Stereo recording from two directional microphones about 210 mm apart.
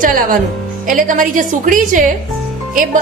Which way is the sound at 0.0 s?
40° right (ahead or behind).